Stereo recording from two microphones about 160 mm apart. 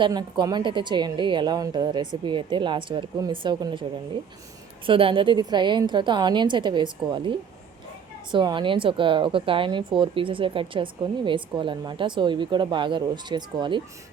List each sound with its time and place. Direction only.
0.0 s a woman's voice: 25° right (ahead or behind)
4.9 s a woman's voice: 35° right (ahead or behind)